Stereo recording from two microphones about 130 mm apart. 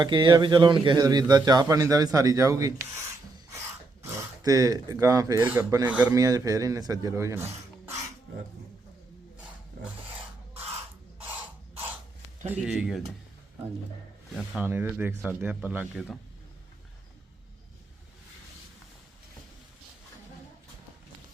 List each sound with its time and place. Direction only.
0.0 s a man's voice: 35° right (ahead or behind)
4.4 s speech: 30° right (ahead or behind)
5.8 s speech: 10° right (ahead or behind)
6.1 s speech: 25° right (ahead or behind)
12.5 s speech: 5° right (ahead or behind)
14.6 s speech: 15° right (ahead or behind)